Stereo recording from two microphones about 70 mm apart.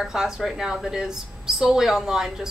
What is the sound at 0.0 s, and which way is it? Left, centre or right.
A woman's voice, centre.